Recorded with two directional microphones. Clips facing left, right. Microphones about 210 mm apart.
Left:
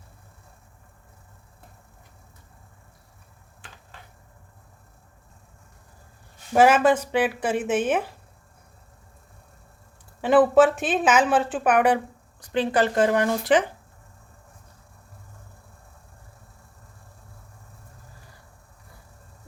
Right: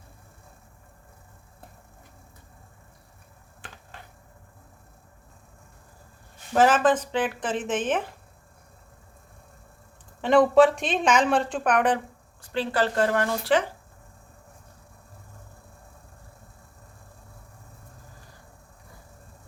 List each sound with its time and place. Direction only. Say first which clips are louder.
6.5 s speech: left 2 dB; 10° left (ahead or behind)
10.2 s a woman's voice: left 1 dB; 5° left (ahead or behind)